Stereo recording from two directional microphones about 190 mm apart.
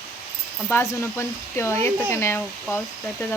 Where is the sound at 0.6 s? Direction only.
15° left (ahead or behind).